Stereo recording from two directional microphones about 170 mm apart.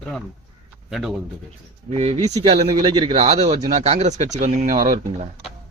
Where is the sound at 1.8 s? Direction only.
40° right (ahead or behind).